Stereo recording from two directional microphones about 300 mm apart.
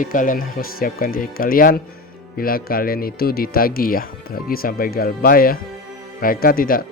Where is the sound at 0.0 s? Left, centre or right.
Left.